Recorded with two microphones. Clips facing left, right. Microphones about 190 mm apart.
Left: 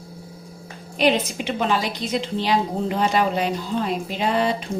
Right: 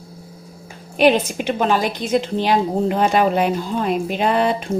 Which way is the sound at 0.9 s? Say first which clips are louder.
Right 5 dB; 55° right (ahead or behind).